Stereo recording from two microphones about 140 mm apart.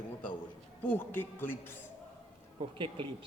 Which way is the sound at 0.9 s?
15° left (ahead or behind).